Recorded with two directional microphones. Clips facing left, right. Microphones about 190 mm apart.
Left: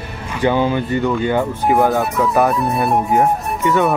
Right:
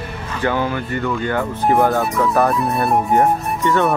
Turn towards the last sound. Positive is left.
turn(degrees=5)  # may be behind; listen again after turning